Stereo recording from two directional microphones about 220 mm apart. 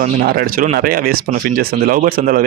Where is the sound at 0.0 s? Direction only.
45° right (ahead or behind).